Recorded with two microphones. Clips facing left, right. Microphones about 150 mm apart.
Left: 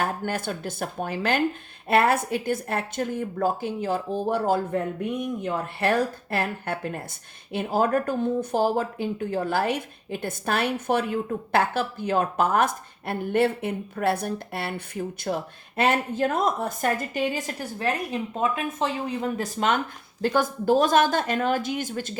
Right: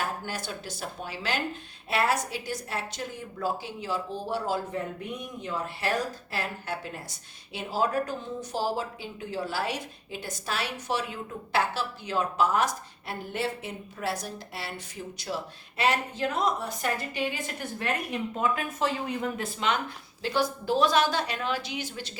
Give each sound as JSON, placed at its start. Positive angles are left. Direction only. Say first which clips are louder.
{"t": 0.0, "sound": "a woman's voice", "louder": "left 6 dB", "side_deg": 55}